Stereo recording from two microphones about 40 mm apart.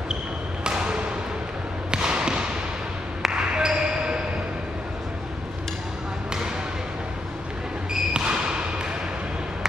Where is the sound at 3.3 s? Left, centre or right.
Right.